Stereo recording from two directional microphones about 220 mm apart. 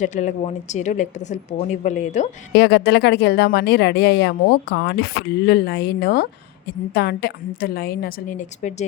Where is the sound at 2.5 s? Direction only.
50° left (ahead or behind).